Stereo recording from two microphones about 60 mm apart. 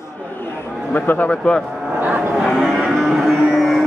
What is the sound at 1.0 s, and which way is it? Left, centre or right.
Speech, left.